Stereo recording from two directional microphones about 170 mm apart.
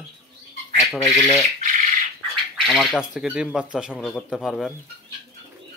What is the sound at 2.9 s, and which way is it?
Speech, 5° right (ahead or behind).